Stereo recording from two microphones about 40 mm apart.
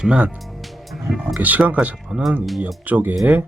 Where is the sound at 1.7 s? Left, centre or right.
Right.